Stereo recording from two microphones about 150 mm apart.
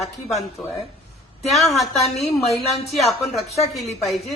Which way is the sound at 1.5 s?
Centre (ahead or behind).